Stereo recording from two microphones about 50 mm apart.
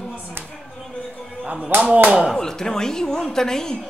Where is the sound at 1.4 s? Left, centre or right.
Right.